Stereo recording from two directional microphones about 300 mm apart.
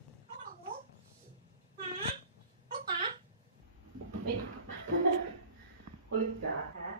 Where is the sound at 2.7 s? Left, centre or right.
Right.